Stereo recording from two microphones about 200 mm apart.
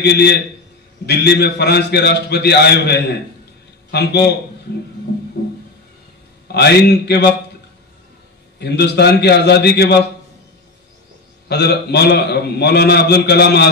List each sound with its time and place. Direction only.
0.0 s a man's voice: 55° left (ahead or behind)
6.4 s a man's voice: 55° left (ahead or behind)
8.5 s a man's voice: 55° left (ahead or behind)
11.4 s a man's voice: 55° left (ahead or behind)